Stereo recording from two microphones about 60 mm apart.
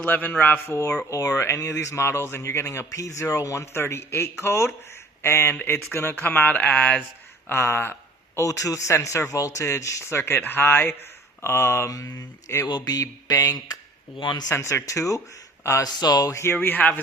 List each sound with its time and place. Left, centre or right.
0.0 s speech: left
1.4 s speech: left
2.9 s speech: left
7.4 s speech: left
8.4 s speech: left
9.3 s speech: left
10.4 s speech: left
11.9 s mantra: left
12.5 s speech: left
12.8 s mantra: left
14.5 s speech: left
14.8 s mantra: left
15.8 s speech: left
16.4 s speech: left